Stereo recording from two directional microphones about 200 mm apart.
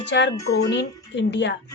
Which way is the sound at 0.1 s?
60° left (ahead or behind).